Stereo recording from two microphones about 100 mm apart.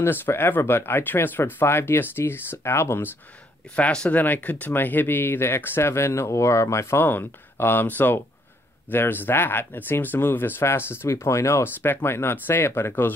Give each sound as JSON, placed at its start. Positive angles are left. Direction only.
{"t": 0.0, "sound": "speech", "side_deg": 20}
{"t": 3.7, "sound": "speech", "side_deg": 10}